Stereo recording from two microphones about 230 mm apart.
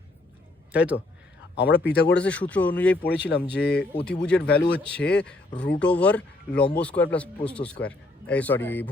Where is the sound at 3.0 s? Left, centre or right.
Left.